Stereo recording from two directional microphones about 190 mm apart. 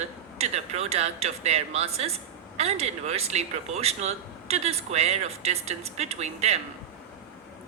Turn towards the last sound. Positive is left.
turn(degrees=-35)  # may be behind; listen again after turning